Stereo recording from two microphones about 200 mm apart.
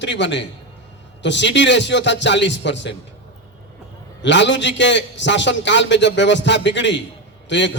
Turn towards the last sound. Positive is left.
turn(degrees=65)  # may be behind; listen again after turning